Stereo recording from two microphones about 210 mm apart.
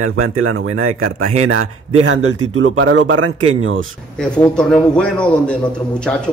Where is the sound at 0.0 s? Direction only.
90° right; by 3.8 s 70° right (ahead or behind).